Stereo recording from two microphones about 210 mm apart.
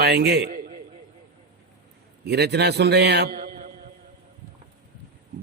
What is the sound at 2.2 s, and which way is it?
A man's voice, 50° right (ahead or behind).